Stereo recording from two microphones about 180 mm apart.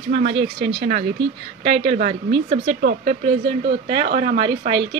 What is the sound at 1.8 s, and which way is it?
A woman's voice, 35° right (ahead or behind).